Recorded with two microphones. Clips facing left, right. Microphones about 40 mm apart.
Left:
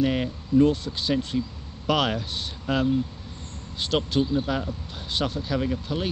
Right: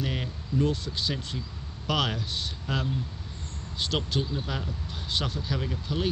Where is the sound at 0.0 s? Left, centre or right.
Left.